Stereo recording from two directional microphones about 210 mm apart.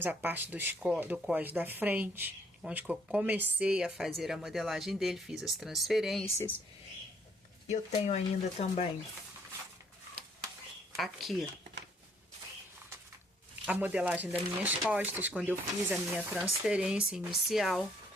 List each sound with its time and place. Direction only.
0.0 s speech: 10° right (ahead or behind)
6.2 s speech: 10° left (ahead or behind)
7.7 s speech: 30° left (ahead or behind)
10.9 s speech: centre (ahead or behind)
13.7 s speech: 5° right (ahead or behind)